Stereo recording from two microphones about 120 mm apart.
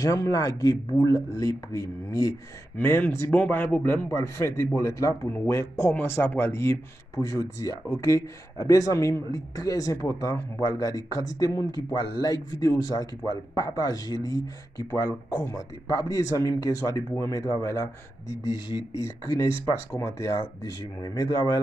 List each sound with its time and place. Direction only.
0.0 s a man's voice: 30° left (ahead or behind)
19.0 s speech: 25° left (ahead or behind)